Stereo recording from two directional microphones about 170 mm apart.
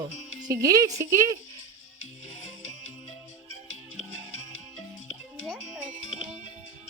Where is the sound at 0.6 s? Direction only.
20° right (ahead or behind).